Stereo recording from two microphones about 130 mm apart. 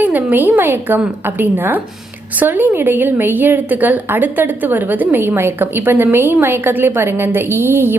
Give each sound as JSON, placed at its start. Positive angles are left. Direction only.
{"t": 0.0, "sound": "a woman's voice", "side_deg": -15}